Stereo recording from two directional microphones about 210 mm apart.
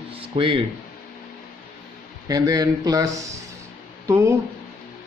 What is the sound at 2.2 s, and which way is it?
A man's voice, 15° right (ahead or behind).